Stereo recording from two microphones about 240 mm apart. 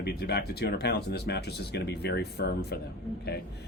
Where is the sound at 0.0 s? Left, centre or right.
Left.